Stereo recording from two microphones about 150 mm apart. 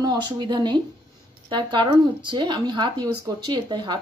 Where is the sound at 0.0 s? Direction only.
30° right (ahead or behind).